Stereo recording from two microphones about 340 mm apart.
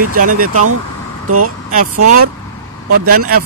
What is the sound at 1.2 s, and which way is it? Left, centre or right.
Speech, right.